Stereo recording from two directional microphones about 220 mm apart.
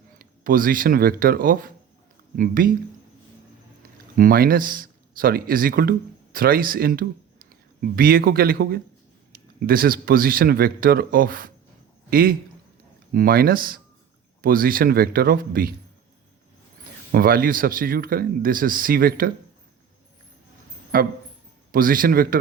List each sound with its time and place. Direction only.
0.2 s speech: 40° right (ahead or behind)
4.2 s speech: 40° right (ahead or behind)
17.1 s speech: 40° right (ahead or behind)
20.9 s speech: 40° right (ahead or behind)